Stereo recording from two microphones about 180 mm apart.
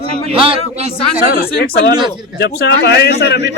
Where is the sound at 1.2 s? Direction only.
55° left (ahead or behind).